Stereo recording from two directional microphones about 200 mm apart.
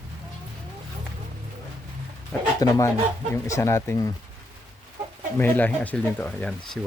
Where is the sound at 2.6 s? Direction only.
15° left (ahead or behind).